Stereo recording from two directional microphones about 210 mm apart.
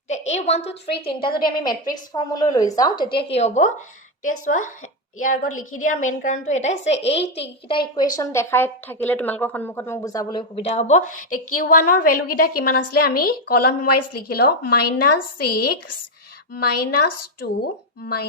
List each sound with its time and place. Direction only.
0.1 s a sound: 30° left (ahead or behind)
1.0 s a woman's voice: 25° left (ahead or behind)
7.1 s a child's voice: 55° left (ahead or behind)
7.9 s a woman's voice: 20° left (ahead or behind)
10.5 s a woman's voice: 30° left (ahead or behind); by 18.3 s 45° left (ahead or behind)